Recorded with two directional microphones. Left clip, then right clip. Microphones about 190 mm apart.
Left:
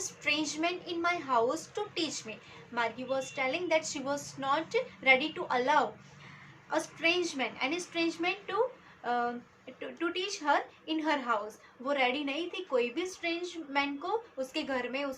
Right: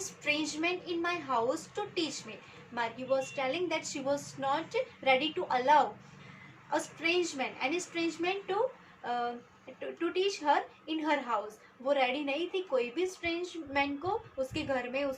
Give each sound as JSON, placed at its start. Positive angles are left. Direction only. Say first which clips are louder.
{"t": 0.3, "sound": "a woman's voice", "louder": "left 1 dB", "side_deg": 40}